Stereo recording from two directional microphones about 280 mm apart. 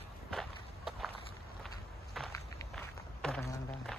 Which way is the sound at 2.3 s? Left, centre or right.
Centre.